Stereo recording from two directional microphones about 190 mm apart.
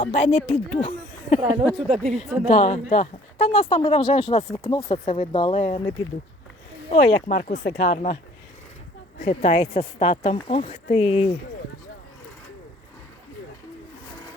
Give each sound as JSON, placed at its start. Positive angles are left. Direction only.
{"t": 0.0, "sound": "speech", "side_deg": 40}
{"t": 2.0, "sound": "a woman's voice", "side_deg": 0}
{"t": 2.5, "sound": "speech", "side_deg": 35}
{"t": 6.9, "sound": "speech", "side_deg": 40}
{"t": 7.9, "sound": "speech", "side_deg": 40}